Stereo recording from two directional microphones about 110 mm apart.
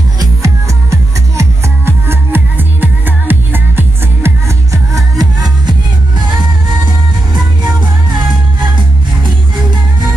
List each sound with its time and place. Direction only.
0.2 s music: 30° right (ahead or behind)
4.9 s music: 35° right (ahead or behind)